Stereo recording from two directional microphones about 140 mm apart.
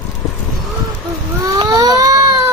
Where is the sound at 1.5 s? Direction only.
25° right (ahead or behind).